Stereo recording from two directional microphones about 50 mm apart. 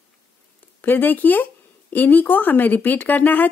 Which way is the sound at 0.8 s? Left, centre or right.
Left.